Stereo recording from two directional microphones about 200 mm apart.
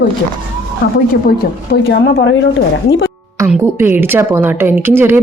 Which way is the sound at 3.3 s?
10° right (ahead or behind).